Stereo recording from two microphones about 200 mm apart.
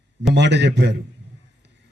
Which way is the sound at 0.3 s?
60° right (ahead or behind).